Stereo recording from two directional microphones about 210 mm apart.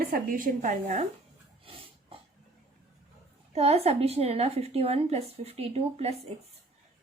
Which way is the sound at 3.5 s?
30° right (ahead or behind).